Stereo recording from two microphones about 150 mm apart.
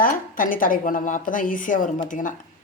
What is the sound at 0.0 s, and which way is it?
A woman's voice, 65° left (ahead or behind).